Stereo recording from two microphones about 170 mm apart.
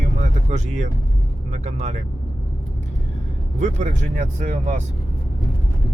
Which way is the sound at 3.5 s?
45° right (ahead or behind).